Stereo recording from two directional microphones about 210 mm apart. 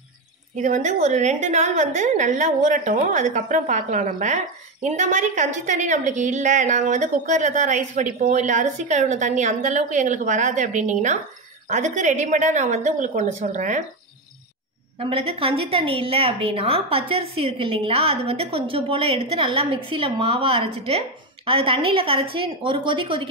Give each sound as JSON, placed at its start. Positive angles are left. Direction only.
{"t": 0.6, "sound": "a woman's voice", "side_deg": -35}
{"t": 15.0, "sound": "a woman's voice", "side_deg": -25}